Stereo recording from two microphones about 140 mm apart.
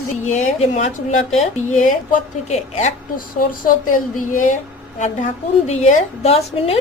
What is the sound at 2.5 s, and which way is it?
Speech, 55° left (ahead or behind).